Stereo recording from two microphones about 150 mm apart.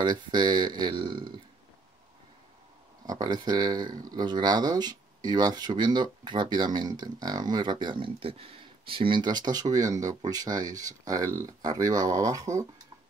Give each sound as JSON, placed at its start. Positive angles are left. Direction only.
{"t": 0.0, "sound": "speech", "side_deg": -30}
{"t": 3.1, "sound": "speech", "side_deg": -25}